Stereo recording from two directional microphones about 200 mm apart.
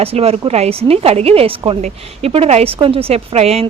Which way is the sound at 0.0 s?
30° right (ahead or behind).